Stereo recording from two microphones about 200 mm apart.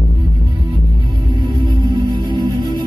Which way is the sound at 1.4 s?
20° right (ahead or behind).